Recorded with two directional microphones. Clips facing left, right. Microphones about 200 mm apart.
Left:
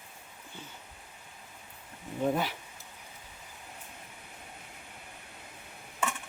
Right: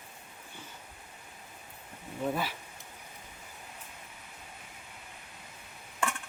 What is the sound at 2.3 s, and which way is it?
Speech, 15° left (ahead or behind).